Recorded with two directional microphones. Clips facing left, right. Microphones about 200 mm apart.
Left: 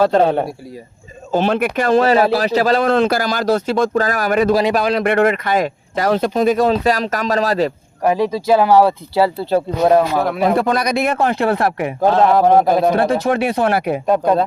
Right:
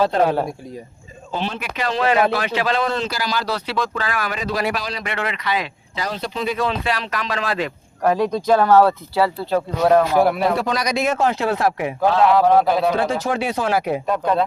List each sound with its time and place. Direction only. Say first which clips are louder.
0.2 s speech: left 3 dB; 30° left (ahead or behind)
1.3 s speech: left 10 dB; 50° left (ahead or behind)
2.8 s speech: left 8 dB; 55° left (ahead or behind)
4.7 s speech: left 11 dB; 55° left (ahead or behind); by 7.7 s 40° left (ahead or behind)
8.0 s speech: left 2 dB; 10° left (ahead or behind)
9.1 s speech: left 6 dB; 30° left (ahead or behind)
10.2 s speech: right 2 dB; 10° right (ahead or behind)
10.5 s speech: left 5 dB; 55° left (ahead or behind)
14.1 s speech: left 6 dB; 40° left (ahead or behind)